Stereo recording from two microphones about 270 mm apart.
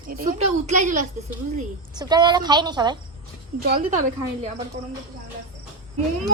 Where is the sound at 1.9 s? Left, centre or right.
Centre.